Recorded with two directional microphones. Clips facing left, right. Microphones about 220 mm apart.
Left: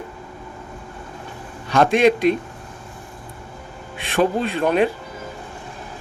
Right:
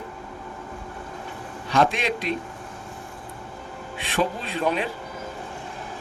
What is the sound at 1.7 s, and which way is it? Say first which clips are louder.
Speech: left 7 dB; 45° left (ahead or behind).